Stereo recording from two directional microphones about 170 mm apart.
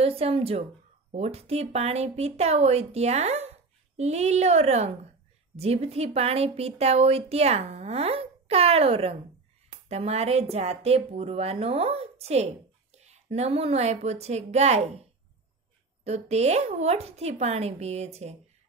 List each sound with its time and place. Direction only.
0.0 s a woman's voice: 35° right (ahead or behind)
16.0 s speech: 40° right (ahead or behind)